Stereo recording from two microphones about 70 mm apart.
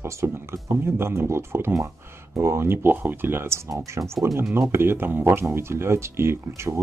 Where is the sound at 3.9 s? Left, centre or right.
Right.